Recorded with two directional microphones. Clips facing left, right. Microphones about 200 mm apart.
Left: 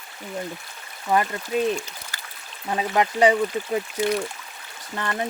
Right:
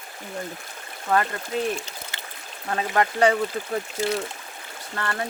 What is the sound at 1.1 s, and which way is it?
Speech, 15° left (ahead or behind).